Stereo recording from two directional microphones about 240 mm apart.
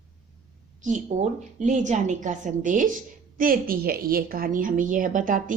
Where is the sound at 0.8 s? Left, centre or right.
Right.